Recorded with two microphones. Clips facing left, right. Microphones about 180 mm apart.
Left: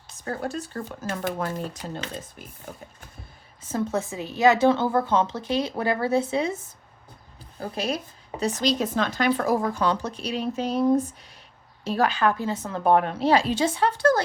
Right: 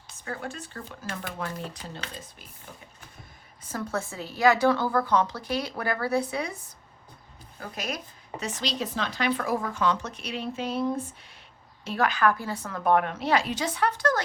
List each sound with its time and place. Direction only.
0.3 s speech: 40° left (ahead or behind)
3.7 s a woman's voice: 20° left (ahead or behind)
7.6 s a woman's voice: 30° left (ahead or behind)